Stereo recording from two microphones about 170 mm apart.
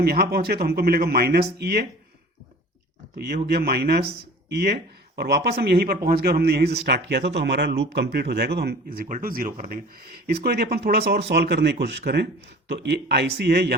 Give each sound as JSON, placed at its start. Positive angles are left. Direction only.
{"t": 0.0, "sound": "speech", "side_deg": -70}
{"t": 3.2, "sound": "speech", "side_deg": -70}
{"t": 11.3, "sound": "speech", "side_deg": -80}